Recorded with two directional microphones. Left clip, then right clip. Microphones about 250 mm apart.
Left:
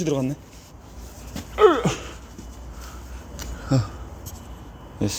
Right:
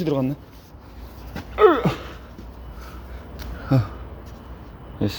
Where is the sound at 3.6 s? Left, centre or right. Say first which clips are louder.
Right 2 dB; centre.